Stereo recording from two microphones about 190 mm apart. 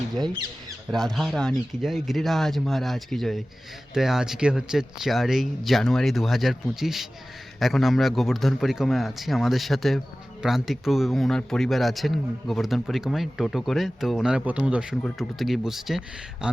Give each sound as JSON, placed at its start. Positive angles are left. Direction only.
{"t": 0.9, "sound": "a man's voice", "side_deg": 0}